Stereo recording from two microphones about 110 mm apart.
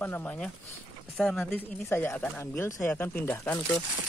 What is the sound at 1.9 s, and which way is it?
Speech, 20° left (ahead or behind).